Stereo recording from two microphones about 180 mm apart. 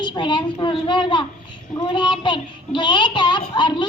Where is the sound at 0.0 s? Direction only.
25° left (ahead or behind).